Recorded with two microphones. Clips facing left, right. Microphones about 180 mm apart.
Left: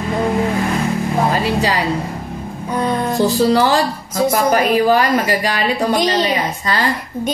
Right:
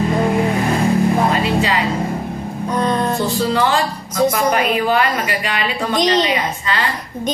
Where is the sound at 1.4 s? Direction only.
35° left (ahead or behind).